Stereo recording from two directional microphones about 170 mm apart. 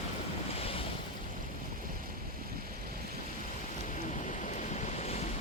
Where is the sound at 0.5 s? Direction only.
35° left (ahead or behind).